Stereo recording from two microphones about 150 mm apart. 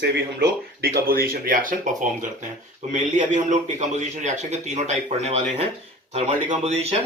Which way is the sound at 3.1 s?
55° right (ahead or behind).